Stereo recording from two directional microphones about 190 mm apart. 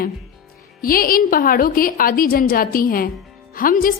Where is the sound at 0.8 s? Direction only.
50° left (ahead or behind).